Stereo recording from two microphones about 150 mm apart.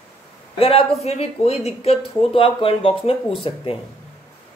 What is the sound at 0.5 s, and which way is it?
A woman's voice, 40° left (ahead or behind).